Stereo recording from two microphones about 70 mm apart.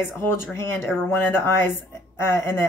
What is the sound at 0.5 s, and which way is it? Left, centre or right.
A woman's voice, left.